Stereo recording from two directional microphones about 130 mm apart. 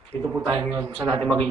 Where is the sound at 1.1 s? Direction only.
5° left (ahead or behind).